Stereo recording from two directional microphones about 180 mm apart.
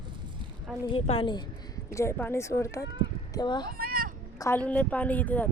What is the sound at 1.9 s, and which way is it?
A woman's voice, 15° left (ahead or behind).